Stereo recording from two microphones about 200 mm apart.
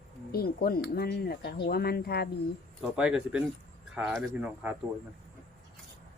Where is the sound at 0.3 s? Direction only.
50° left (ahead or behind).